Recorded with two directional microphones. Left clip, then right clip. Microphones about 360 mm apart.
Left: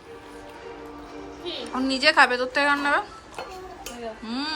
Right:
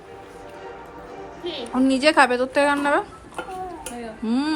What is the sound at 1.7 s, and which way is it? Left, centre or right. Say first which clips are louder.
A woman's voice: right 2 dB; centre.